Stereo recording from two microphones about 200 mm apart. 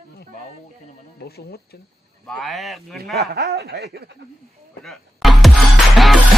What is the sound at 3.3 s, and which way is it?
Speech, 55° right (ahead or behind).